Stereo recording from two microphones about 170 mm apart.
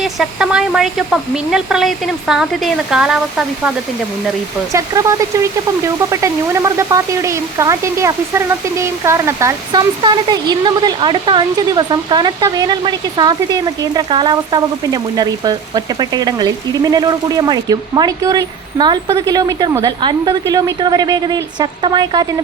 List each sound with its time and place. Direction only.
0.0 s speech: 5° right (ahead or behind)
4.7 s speech: 20° right (ahead or behind)